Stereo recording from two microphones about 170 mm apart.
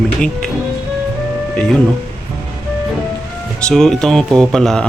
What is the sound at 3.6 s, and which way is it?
Speech, centre (ahead or behind).